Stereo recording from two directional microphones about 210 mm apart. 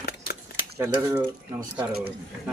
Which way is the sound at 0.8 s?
15° right (ahead or behind).